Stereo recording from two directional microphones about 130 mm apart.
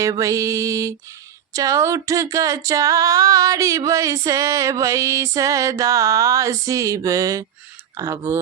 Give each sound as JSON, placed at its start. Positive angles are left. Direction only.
{"t": 0.0, "sound": "female singing", "side_deg": -25}